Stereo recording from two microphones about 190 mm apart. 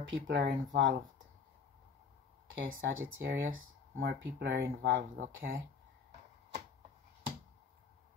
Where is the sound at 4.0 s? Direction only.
65° right (ahead or behind).